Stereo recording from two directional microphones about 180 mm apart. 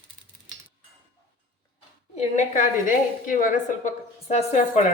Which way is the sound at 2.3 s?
45° left (ahead or behind).